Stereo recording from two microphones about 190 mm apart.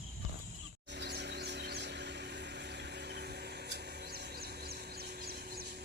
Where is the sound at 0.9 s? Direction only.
65° right (ahead or behind).